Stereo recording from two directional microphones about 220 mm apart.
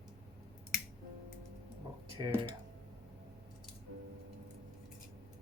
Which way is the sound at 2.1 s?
20° right (ahead or behind).